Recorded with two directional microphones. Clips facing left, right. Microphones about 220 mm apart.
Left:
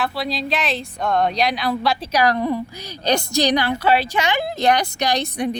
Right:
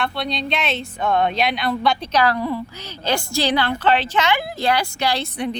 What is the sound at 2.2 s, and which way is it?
A woman's voice, 20° left (ahead or behind).